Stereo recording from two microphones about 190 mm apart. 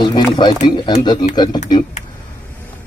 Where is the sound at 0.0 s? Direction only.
25° left (ahead or behind).